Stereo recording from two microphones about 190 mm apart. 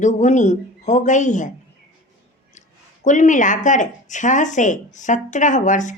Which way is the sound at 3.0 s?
40° left (ahead or behind).